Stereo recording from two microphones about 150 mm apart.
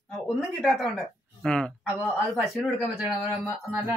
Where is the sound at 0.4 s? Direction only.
Centre (ahead or behind).